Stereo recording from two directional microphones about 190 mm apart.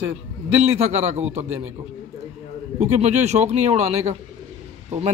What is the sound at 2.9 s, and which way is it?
Speech, 35° right (ahead or behind).